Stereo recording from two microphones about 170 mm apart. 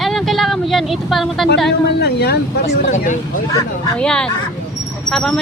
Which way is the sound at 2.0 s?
70° left (ahead or behind).